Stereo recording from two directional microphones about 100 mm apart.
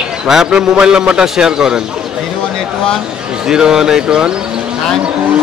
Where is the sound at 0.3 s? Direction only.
5° right (ahead or behind).